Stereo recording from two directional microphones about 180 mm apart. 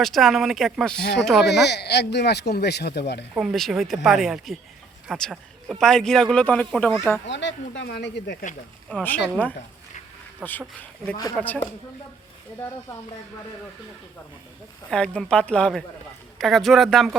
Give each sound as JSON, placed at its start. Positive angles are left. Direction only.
{"t": 0.0, "sound": "a man's voice", "side_deg": 0}
{"t": 1.5, "sound": "speech", "side_deg": 70}
{"t": 3.3, "sound": "a man's voice", "side_deg": 0}
{"t": 7.3, "sound": "speech", "side_deg": 85}
{"t": 8.9, "sound": "speech", "side_deg": 5}
{"t": 10.4, "sound": "a man's voice", "side_deg": -5}
{"t": 11.3, "sound": "speech", "side_deg": 5}
{"t": 14.8, "sound": "a man's voice", "side_deg": 5}